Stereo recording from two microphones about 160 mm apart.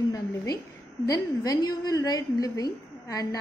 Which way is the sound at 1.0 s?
25° left (ahead or behind).